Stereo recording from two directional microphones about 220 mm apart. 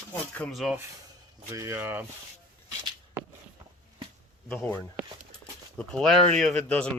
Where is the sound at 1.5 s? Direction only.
15° right (ahead or behind).